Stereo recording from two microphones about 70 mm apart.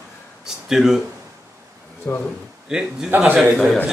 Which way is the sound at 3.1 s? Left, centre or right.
Right.